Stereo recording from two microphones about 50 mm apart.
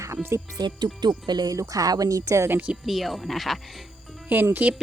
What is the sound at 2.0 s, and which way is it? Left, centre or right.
Speech, right.